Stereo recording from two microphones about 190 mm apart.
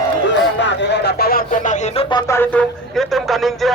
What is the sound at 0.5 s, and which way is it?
Speech, 70° left (ahead or behind).